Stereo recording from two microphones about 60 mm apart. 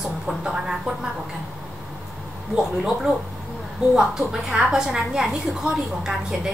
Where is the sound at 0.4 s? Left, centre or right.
Centre.